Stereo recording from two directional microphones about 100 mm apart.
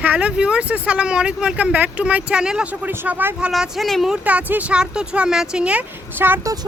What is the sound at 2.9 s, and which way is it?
Speech, 20° right (ahead or behind).